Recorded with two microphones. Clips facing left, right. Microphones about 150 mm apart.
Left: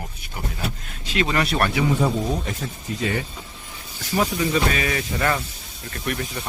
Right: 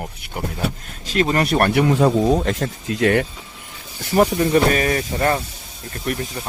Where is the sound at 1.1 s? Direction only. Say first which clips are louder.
Right 4 dB; 40° right (ahead or behind); by 3.2 s 75° right (ahead or behind).